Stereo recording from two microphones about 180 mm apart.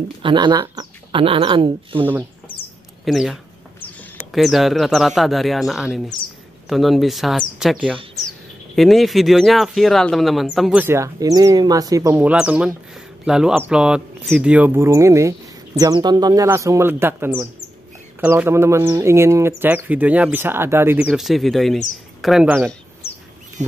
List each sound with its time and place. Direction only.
0.2 s speech: 25° right (ahead or behind)
3.1 s speech: centre (ahead or behind)
21.1 s speech: centre (ahead or behind)